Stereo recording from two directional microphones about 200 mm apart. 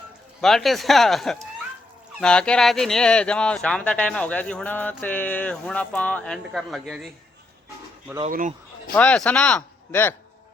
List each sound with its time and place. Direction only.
0.4 s speech: centre (ahead or behind)
8.3 s speech: 40° right (ahead or behind)
9.0 s speech: 5° left (ahead or behind)